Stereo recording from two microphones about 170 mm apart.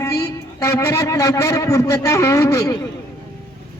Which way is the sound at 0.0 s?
20° left (ahead or behind).